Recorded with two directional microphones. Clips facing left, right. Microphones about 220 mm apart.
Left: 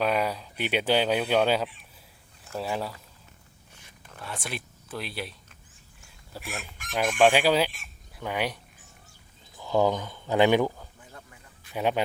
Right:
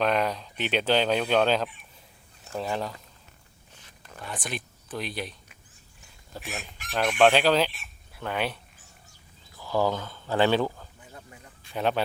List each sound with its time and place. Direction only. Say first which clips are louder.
0.0 s speech: right 1 dB; 10° left (ahead or behind)
4.1 s speech: right 1 dB; 5° left (ahead or behind)
6.3 s speech: even; 5° left (ahead or behind)
9.6 s speech: left 2 dB; 20° left (ahead or behind)
11.1 s a sound: right 2 dB; 25° right (ahead or behind)
11.7 s speech: even; 10° left (ahead or behind)